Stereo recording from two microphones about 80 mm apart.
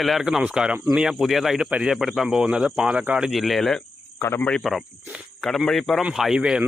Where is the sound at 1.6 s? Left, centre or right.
Centre.